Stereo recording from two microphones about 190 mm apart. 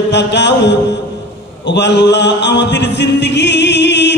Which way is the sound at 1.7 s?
65° left (ahead or behind).